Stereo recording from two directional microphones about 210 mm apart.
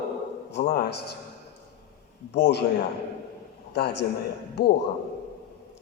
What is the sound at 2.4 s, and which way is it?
Speech, 55° left (ahead or behind).